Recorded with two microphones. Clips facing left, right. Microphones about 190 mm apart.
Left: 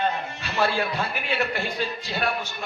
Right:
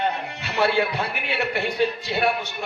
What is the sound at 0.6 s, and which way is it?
A man's voice, 65° right (ahead or behind).